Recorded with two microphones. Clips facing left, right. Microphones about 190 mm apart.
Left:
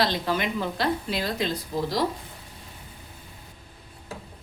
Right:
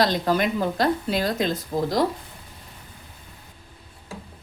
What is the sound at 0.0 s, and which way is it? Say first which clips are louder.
A woman's voice: right 4 dB; 45° right (ahead or behind).